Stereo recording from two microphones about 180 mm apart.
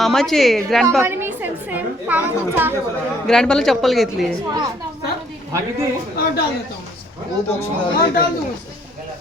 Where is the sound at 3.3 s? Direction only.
5° left (ahead or behind).